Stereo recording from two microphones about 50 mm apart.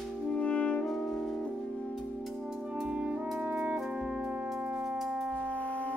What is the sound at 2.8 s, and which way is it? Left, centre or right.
Music, right.